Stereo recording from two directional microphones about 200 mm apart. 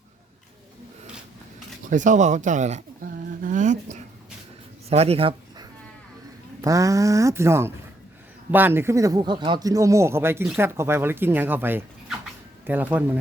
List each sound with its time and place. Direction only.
1.9 s speech: 40° right (ahead or behind)
3.4 s a sound: 40° right (ahead or behind)
4.9 s speech: 30° right (ahead or behind)
6.6 s speech: 15° right (ahead or behind)